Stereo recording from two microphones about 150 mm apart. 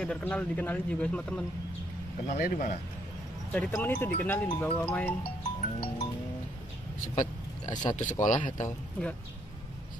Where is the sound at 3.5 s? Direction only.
10° left (ahead or behind).